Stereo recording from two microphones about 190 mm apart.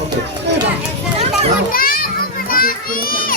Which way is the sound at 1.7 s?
50° left (ahead or behind).